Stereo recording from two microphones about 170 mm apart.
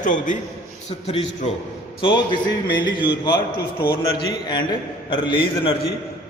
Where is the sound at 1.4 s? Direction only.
40° left (ahead or behind).